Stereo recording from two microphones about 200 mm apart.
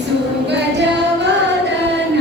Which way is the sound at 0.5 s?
60° right (ahead or behind).